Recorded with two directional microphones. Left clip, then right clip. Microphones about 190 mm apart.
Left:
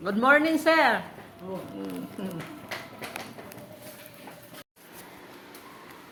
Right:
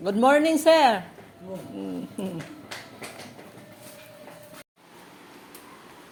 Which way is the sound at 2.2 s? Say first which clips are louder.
Right 4 dB; 45° right (ahead or behind).